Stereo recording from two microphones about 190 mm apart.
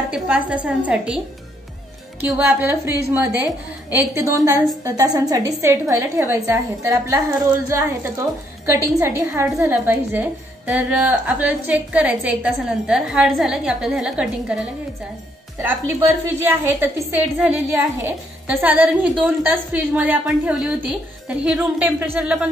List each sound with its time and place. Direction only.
0.1 s a woman's voice: 5° right (ahead or behind)
2.2 s a woman's voice: 10° right (ahead or behind)
16.4 s a woman's voice: 10° right (ahead or behind)